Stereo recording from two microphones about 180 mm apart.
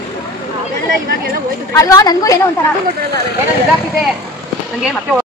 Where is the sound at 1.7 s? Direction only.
20° left (ahead or behind).